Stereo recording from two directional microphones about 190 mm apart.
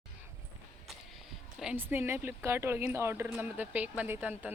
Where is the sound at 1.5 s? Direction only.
5° right (ahead or behind).